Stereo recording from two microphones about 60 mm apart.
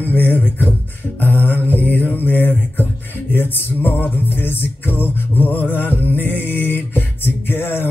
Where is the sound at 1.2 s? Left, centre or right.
Left.